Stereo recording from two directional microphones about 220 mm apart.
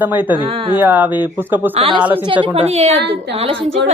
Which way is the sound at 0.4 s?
25° right (ahead or behind).